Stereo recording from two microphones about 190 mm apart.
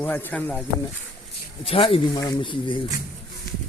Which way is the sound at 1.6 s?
30° left (ahead or behind).